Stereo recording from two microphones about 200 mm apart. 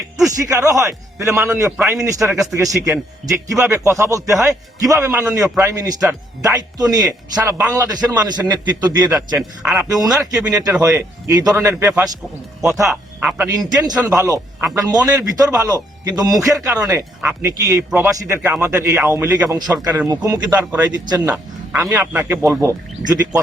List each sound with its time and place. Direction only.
0.3 s a man's voice: 15° right (ahead or behind)
13.7 s a man's voice: 20° right (ahead or behind)
20.8 s a man's voice: 20° right (ahead or behind)
21.9 s speech: 10° right (ahead or behind)